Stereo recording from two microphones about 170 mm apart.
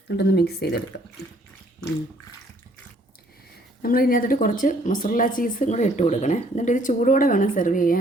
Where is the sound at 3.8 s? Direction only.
60° left (ahead or behind).